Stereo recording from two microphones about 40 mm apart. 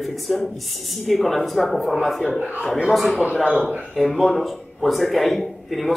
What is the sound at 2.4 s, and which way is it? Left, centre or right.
Speech, right.